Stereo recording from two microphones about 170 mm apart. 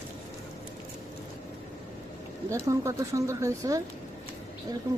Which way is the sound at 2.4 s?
15° right (ahead or behind).